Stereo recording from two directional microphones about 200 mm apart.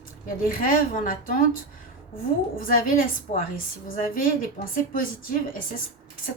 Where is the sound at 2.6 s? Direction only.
45° left (ahead or behind).